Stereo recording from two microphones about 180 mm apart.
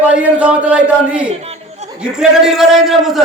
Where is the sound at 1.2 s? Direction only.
35° right (ahead or behind).